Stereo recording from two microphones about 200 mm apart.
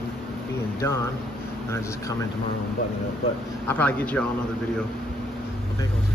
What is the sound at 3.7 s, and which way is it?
Speech, 10° left (ahead or behind).